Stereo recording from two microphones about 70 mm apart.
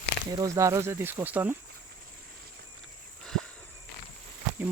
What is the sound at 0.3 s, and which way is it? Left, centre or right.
Speech, right.